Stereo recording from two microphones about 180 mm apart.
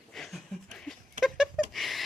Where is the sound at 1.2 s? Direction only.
45° right (ahead or behind).